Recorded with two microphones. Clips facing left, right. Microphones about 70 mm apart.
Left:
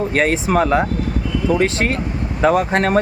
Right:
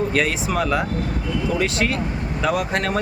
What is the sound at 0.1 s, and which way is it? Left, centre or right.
Speech, left.